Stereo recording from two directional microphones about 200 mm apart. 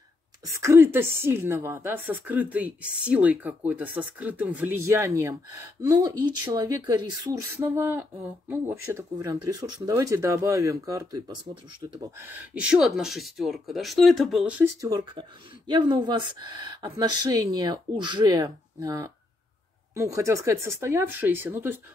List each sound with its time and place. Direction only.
0.6 s speech: 15° right (ahead or behind)
12.5 s speech: 5° right (ahead or behind)
14.6 s speech: 15° right (ahead or behind)